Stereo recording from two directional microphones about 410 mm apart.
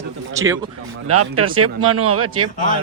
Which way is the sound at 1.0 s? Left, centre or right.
Right.